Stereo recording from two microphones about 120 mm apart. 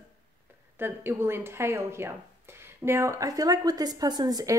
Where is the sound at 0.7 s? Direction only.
20° right (ahead or behind).